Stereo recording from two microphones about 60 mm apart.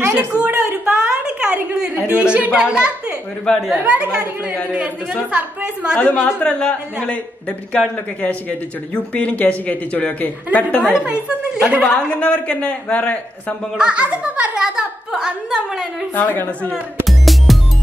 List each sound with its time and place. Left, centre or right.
0.3 s a woman's voice: right
0.8 s a sound: centre
1.8 s speech: centre
5.9 s a man's voice: left
10.8 s speech: centre
12.2 s a man's voice: left
13.7 s speech: centre
16.2 s a man's voice: left
17.0 s music: centre